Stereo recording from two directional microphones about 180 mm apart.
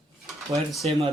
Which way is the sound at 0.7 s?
Centre (ahead or behind).